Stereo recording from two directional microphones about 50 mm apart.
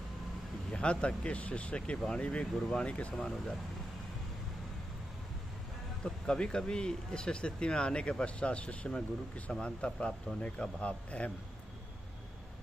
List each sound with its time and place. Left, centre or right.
0.7 s a man's voice: left
6.0 s a man's voice: centre